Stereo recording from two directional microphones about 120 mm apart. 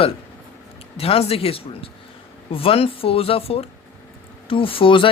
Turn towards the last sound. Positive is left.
turn(degrees=45)  # may be behind; listen again after turning